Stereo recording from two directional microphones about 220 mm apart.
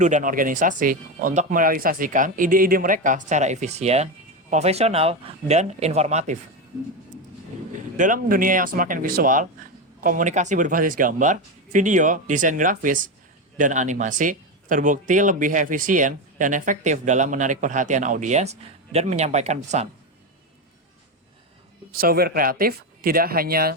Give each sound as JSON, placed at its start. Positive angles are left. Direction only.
{"t": 0.0, "sound": "a man's voice", "side_deg": -35}
{"t": 7.9, "sound": "a man's voice", "side_deg": -35}
{"t": 21.9, "sound": "speech", "side_deg": -45}